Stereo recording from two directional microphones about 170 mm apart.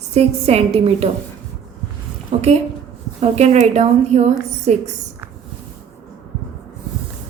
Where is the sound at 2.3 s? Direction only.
35° right (ahead or behind).